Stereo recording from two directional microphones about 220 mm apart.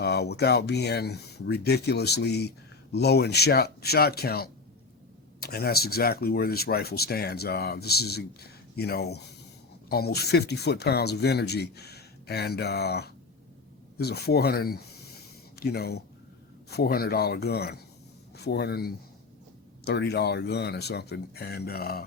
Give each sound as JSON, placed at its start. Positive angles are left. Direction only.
{"t": 0.0, "sound": "speech", "side_deg": 50}